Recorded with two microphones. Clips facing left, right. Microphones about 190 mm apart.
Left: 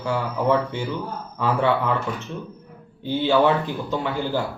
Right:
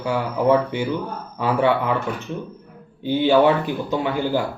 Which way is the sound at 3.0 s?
15° right (ahead or behind).